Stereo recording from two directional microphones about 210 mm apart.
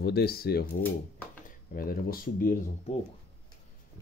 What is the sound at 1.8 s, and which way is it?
Speech, 45° left (ahead or behind).